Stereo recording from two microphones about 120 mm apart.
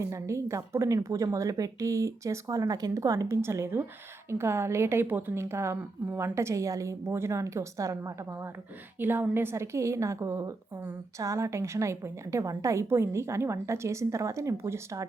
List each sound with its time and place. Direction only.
0.0 s a woman's voice: 25° right (ahead or behind)